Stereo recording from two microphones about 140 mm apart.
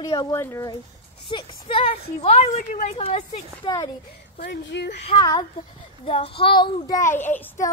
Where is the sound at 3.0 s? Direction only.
40° left (ahead or behind).